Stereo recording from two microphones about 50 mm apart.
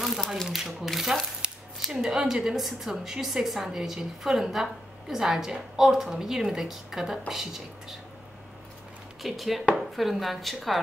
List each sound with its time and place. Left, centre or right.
0.5 s speech: centre
1.4 s shuffling cards: centre
1.9 s a woman's voice: centre
9.2 s speech: centre